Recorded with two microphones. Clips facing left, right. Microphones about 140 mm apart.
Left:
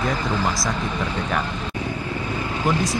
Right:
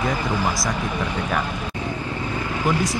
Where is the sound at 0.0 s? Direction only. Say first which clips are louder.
Even; 15° right (ahead or behind).